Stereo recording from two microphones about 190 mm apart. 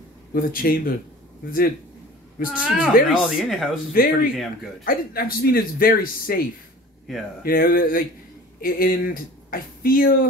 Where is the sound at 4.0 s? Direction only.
50° left (ahead or behind).